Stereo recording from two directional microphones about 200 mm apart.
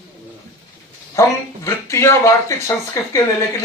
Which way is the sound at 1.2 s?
15° left (ahead or behind).